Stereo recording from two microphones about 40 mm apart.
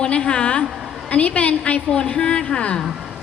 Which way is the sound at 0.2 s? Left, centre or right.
Left.